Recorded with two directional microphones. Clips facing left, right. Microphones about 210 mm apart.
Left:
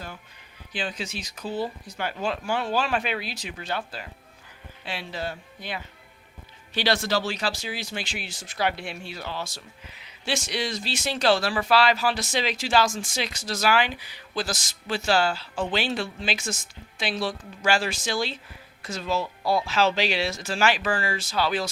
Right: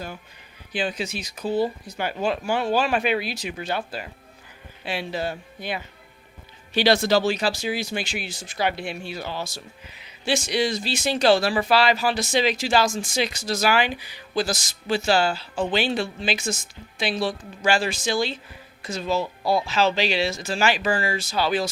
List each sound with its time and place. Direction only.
0.7 s speech: 10° right (ahead or behind)
18.8 s speech: 15° right (ahead or behind)
19.7 s speech: 5° left (ahead or behind)
20.3 s speech: 5° right (ahead or behind)